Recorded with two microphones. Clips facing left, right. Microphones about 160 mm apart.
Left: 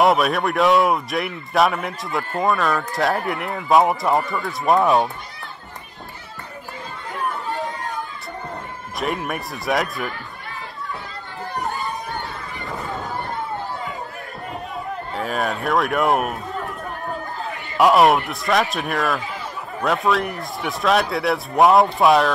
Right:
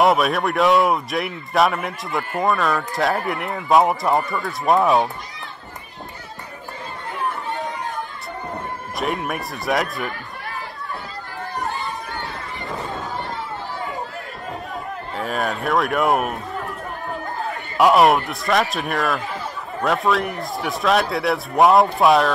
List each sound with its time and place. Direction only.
0.0 s speech: centre (ahead or behind)
8.9 s speech: centre (ahead or behind)
15.1 s speech: centre (ahead or behind)
17.7 s speech: centre (ahead or behind)